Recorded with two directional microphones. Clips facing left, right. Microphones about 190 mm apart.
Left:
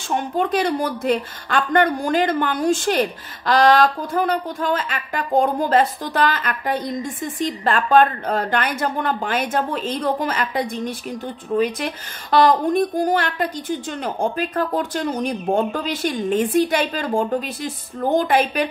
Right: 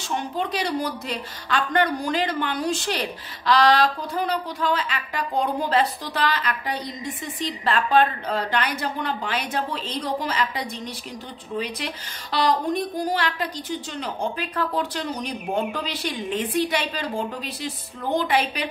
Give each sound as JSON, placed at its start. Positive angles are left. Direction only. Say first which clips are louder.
{"t": 0.1, "sound": "a woman's voice", "louder": "left 6 dB", "side_deg": 50}